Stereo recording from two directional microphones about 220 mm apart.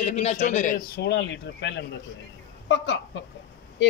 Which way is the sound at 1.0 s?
50° left (ahead or behind).